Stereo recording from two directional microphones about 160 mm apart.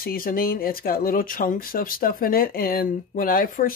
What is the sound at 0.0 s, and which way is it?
Speech, 65° left (ahead or behind).